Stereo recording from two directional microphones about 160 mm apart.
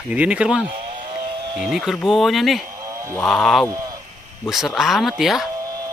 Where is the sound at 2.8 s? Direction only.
20° right (ahead or behind).